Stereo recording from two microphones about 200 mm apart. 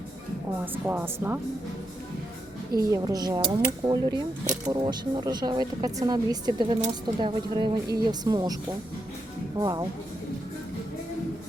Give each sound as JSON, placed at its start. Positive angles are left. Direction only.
{"t": 0.6, "sound": "speech", "side_deg": -10}
{"t": 2.9, "sound": "speech", "side_deg": -20}
{"t": 9.6, "sound": "speech", "side_deg": -20}